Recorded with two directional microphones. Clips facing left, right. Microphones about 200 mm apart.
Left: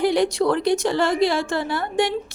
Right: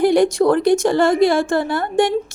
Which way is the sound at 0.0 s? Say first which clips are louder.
Right 5 dB; 50° right (ahead or behind).